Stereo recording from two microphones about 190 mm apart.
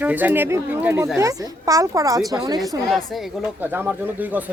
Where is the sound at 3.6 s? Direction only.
10° right (ahead or behind).